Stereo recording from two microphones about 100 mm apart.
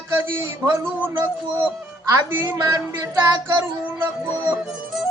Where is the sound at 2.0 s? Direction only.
30° right (ahead or behind).